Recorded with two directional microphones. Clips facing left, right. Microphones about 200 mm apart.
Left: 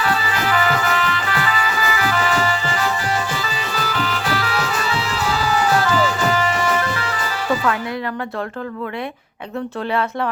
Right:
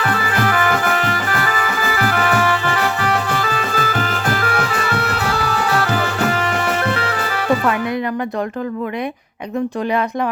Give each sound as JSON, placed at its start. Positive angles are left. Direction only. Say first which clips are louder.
{"t": 0.1, "sound": "music", "louder": "right 2 dB", "side_deg": -55}